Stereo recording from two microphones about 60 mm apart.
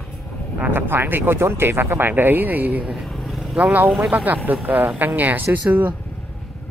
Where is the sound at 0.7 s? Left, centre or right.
Right.